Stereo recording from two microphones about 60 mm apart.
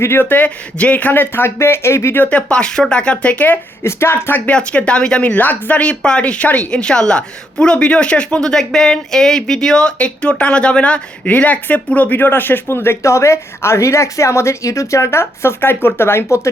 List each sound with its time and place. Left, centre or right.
0.0 s speech: left
2.1 s speech: left
2.5 s speech: centre
3.8 s a woman's voice: left
4.4 s a woman's voice: left
5.8 s a woman's voice: centre; by 13.0 s left
13.0 s a woman's voice: left